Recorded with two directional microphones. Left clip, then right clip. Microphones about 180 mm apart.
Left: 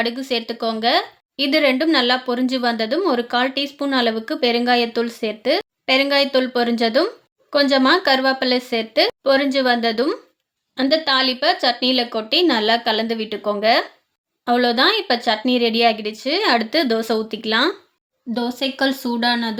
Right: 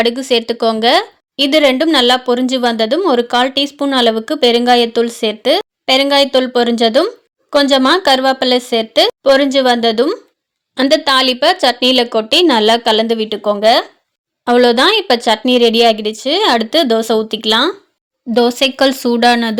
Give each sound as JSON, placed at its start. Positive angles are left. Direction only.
{"t": 0.0, "sound": "a woman's voice", "side_deg": -45}
{"t": 10.8, "sound": "a woman's voice", "side_deg": -45}
{"t": 14.4, "sound": "speech", "side_deg": -40}
{"t": 18.3, "sound": "speech", "side_deg": -50}